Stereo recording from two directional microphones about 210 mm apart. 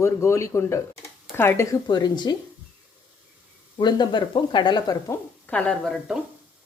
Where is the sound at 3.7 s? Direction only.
20° left (ahead or behind).